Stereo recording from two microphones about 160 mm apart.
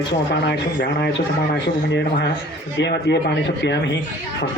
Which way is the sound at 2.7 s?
90° left.